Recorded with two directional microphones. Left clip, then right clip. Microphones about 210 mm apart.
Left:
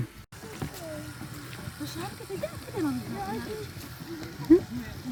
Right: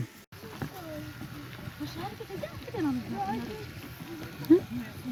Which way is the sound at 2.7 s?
35° right (ahead or behind).